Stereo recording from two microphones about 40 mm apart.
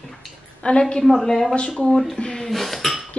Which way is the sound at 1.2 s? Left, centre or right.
Centre.